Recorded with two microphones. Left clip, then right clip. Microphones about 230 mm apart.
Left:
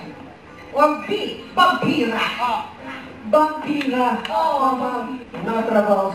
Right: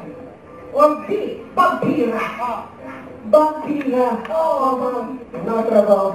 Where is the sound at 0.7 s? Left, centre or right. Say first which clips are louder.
Right 3 dB; left.